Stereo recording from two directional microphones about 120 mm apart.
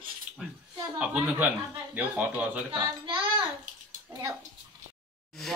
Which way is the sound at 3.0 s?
45° right (ahead or behind).